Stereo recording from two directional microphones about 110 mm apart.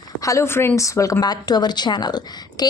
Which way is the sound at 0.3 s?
25° left (ahead or behind).